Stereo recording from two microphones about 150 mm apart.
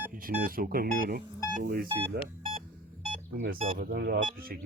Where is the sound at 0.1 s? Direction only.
70° right (ahead or behind).